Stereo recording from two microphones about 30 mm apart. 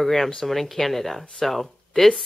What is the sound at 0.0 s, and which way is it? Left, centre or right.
Speech, centre.